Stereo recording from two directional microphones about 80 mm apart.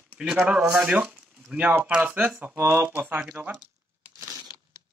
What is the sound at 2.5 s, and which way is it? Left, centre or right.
Speech, right.